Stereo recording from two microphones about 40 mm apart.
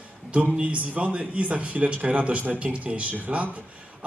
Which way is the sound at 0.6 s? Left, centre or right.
Right.